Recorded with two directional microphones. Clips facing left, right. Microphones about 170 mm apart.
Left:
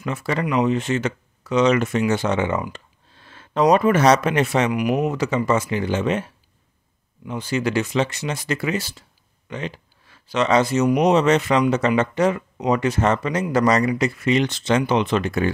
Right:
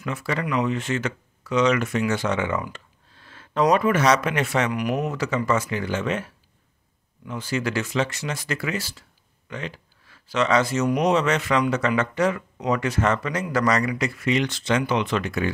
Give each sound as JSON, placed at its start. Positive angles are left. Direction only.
{"t": 0.0, "sound": "speech", "side_deg": 25}